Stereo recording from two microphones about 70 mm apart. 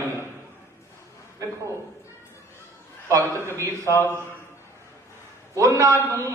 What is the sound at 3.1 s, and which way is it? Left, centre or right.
Speech, right.